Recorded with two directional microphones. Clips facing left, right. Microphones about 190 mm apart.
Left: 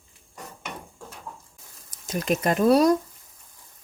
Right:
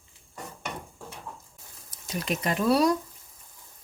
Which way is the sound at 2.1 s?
45° left (ahead or behind).